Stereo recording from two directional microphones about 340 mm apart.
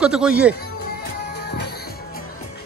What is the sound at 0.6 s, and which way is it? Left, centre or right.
Music, left.